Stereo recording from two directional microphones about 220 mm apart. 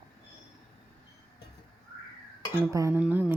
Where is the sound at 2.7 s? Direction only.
15° right (ahead or behind).